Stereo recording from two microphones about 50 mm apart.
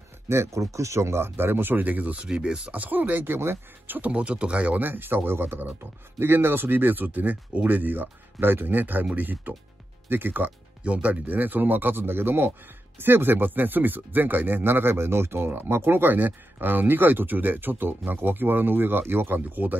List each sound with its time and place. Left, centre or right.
0.3 s speech: right
2.2 s speech: centre; by 4.1 s right
4.1 s speech: right
10.8 s speech: right